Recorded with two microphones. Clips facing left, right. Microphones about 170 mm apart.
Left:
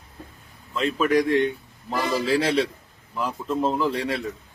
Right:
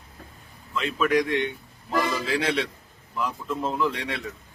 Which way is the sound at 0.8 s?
35° left (ahead or behind).